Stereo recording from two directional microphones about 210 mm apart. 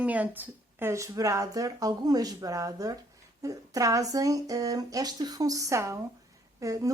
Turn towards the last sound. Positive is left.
turn(degrees=-15)  # may be behind; listen again after turning